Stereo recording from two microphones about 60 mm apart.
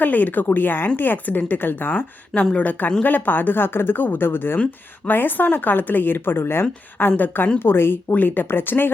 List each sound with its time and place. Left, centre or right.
0.0 s speech: left